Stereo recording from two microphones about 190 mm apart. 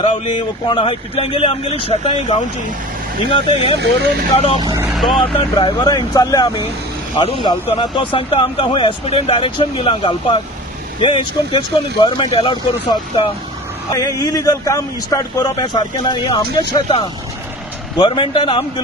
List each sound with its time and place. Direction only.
0.7 s speech: 30° left (ahead or behind)
4.9 s speech: centre (ahead or behind)
5.2 s speech: 25° left (ahead or behind)